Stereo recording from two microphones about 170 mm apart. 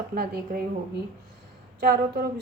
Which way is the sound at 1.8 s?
70° right (ahead or behind).